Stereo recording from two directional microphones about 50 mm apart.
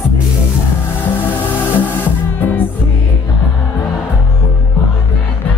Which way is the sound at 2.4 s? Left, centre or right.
Left.